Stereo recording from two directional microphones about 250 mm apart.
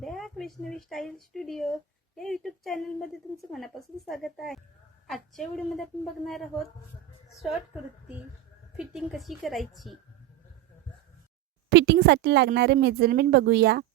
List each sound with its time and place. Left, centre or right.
0.0 s a woman's voice: centre
8.8 s a woman's voice: centre
11.7 s speech: right